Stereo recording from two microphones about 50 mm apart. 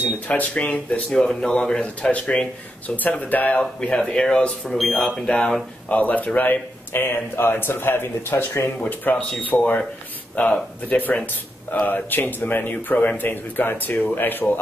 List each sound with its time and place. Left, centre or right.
0.3 s speech: left
1.1 s speech: centre
2.0 s a man's voice: left
3.5 s speech: left
4.6 s speech: centre
5.9 s a man's voice: left
6.5 s speech: left
8.7 s a man's voice: left
9.5 s speech: left
11.8 s a man's voice: left